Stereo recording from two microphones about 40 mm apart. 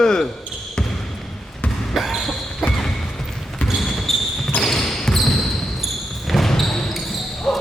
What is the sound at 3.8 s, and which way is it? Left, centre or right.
Basketball bounce, centre.